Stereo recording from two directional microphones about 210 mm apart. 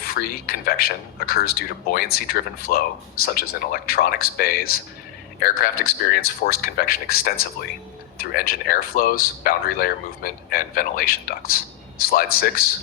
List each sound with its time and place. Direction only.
0.0 s speech: 45° left (ahead or behind)